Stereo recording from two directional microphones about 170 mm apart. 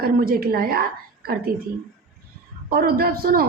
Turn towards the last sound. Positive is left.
turn(degrees=-60)  # may be behind; listen again after turning